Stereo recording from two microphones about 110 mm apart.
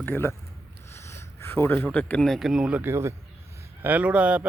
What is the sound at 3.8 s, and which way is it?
Speech, 15° right (ahead or behind).